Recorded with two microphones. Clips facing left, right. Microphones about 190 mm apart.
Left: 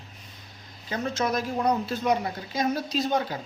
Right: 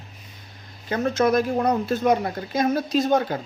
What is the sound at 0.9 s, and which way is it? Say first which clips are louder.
Speech: right 7 dB; 55° right (ahead or behind).